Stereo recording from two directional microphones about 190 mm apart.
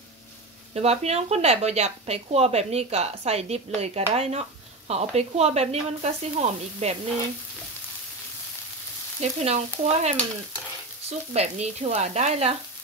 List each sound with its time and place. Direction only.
0.7 s speech: 35° right (ahead or behind)
9.2 s speech: 35° right (ahead or behind)